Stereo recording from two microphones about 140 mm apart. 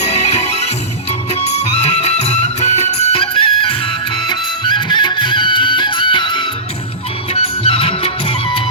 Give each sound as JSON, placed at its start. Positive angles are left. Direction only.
{"t": 0.0, "sound": "music", "side_deg": 50}